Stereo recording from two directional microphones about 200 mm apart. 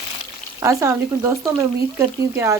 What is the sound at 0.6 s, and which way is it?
Speech, 15° right (ahead or behind).